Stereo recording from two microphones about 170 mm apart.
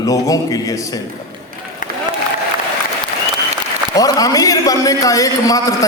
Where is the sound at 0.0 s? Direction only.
20° left (ahead or behind).